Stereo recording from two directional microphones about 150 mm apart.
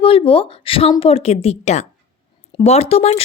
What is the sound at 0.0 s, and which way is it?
A woman's voice, 40° left (ahead or behind).